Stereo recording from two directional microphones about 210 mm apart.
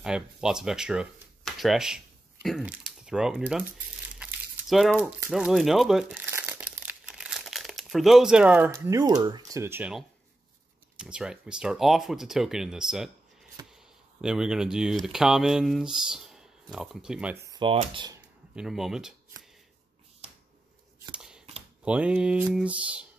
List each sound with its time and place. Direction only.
0.0 s speech: 5° right (ahead or behind)
4.2 s crumpling: centre (ahead or behind)
11.0 s speech: 5° right (ahead or behind)
17.5 s typewriter: 25° right (ahead or behind)
18.5 s speech: 5° right (ahead or behind)
21.0 s scissors: 5° right (ahead or behind)
21.8 s speech: 5° right (ahead or behind)